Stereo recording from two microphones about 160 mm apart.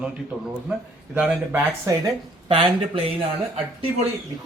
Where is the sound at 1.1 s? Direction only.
10° right (ahead or behind).